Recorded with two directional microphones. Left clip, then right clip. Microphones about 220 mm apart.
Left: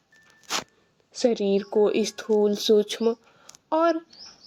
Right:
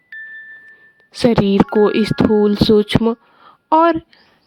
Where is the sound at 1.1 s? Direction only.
50° right (ahead or behind).